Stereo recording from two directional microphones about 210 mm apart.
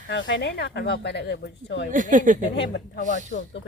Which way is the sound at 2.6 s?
55° left (ahead or behind).